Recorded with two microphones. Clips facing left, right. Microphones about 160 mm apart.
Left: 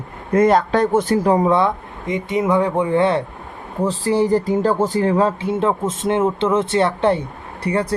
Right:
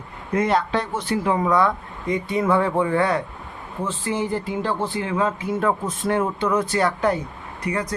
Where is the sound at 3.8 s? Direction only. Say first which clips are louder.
Left 8 dB; 35° left (ahead or behind).